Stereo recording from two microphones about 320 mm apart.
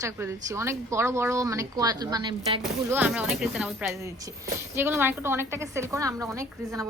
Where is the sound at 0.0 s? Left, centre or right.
Centre.